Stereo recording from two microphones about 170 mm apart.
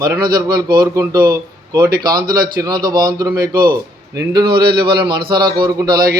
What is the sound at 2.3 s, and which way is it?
Speech, 60° right (ahead or behind).